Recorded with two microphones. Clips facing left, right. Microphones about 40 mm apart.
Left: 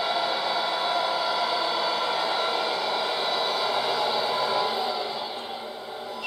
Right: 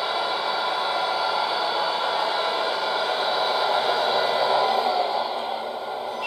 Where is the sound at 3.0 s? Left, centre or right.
Right.